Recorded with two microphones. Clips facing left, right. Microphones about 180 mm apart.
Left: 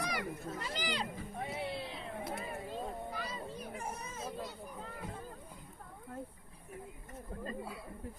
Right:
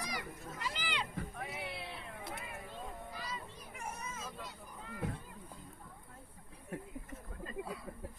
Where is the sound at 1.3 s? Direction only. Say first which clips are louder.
Left 4 dB; 30° left (ahead or behind).